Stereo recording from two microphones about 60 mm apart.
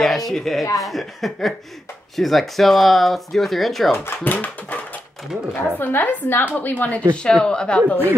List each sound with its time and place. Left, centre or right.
0.0 s speech: centre
3.9 s speech: left
7.2 s speech: centre